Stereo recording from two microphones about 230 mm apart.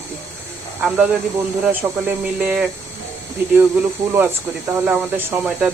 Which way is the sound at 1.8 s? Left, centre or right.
Centre.